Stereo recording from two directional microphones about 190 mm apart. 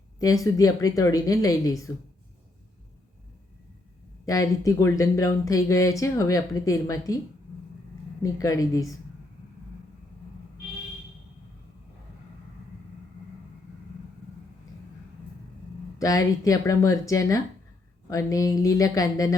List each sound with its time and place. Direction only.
0.2 s a woman's voice: 20° left (ahead or behind)
4.3 s speech: 15° left (ahead or behind)
8.2 s speech: 20° left (ahead or behind)
16.0 s speech: 20° left (ahead or behind)